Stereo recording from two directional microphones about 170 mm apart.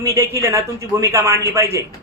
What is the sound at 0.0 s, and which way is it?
A man's voice, 15° right (ahead or behind).